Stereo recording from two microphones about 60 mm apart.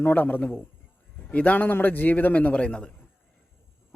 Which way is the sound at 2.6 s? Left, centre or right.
Centre.